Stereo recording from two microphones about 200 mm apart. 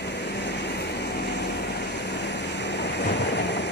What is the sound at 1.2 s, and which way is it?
Vehicle, 60° left (ahead or behind).